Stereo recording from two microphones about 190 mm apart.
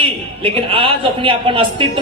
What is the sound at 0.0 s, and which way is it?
A man's voice, 30° right (ahead or behind).